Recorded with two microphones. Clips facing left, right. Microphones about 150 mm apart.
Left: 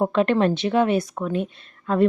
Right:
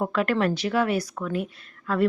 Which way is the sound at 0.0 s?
25° left (ahead or behind).